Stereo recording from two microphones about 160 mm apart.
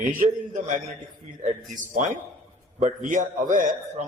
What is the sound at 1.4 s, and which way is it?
A man's voice, 50° right (ahead or behind).